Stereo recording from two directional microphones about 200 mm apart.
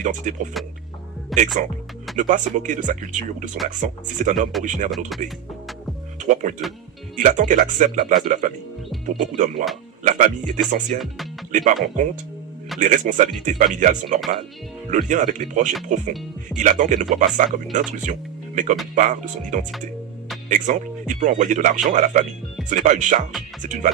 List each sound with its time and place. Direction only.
0.0 s speech: 35° right (ahead or behind)
0.6 s speech: centre (ahead or behind)
2.1 s speech: 40° right (ahead or behind)
4.9 s speech: centre (ahead or behind)
6.1 s speech: 40° right (ahead or behind)
10.0 s music: 40° right (ahead or behind)
10.9 s speech: centre (ahead or behind)
11.5 s speech: 40° right (ahead or behind)